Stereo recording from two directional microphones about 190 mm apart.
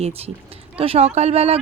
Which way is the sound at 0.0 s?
30° right (ahead or behind).